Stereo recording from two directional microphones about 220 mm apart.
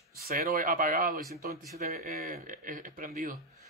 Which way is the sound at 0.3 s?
40° right (ahead or behind).